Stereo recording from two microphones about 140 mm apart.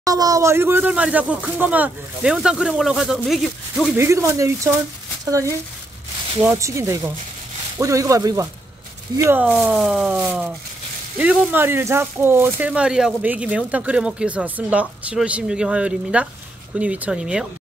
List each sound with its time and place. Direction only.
0.0 s speech: 25° right (ahead or behind); by 3.9 s centre (ahead or behind)
3.9 s speech: 20° right (ahead or behind)
9.5 s speech: centre (ahead or behind)